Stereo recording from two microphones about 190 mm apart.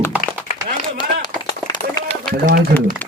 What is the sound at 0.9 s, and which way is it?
Run, 20° left (ahead or behind).